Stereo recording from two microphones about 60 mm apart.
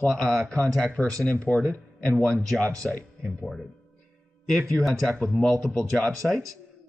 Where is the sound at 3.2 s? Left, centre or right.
Centre.